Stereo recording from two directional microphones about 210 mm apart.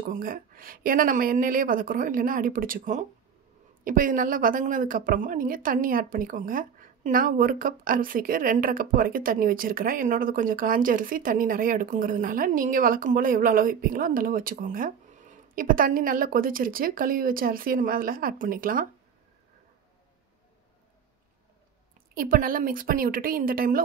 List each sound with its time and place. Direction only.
0.0 s a woman's voice: 45° right (ahead or behind)
22.1 s a woman's voice: 45° right (ahead or behind)